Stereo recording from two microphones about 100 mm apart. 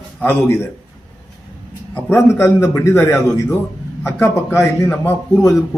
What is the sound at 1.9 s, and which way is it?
A man's voice, 25° left (ahead or behind).